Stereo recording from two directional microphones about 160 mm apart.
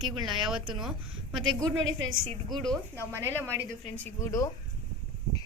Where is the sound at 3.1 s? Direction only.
15° right (ahead or behind).